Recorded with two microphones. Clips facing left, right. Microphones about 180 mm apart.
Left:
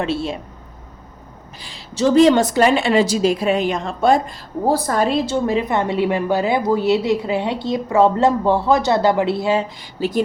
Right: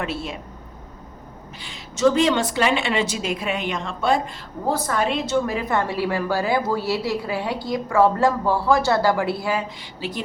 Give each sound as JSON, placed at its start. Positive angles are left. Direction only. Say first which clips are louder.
{"t": 0.0, "sound": "a woman's voice", "louder": "left 6 dB", "side_deg": 30}
{"t": 1.6, "sound": "a woman's voice", "louder": "left 1 dB", "side_deg": 35}
{"t": 10.0, "sound": "speech", "louder": "left 10 dB", "side_deg": 40}